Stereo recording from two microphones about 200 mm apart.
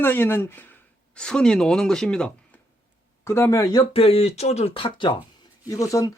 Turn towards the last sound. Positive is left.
turn(degrees=15)  # may be behind; listen again after turning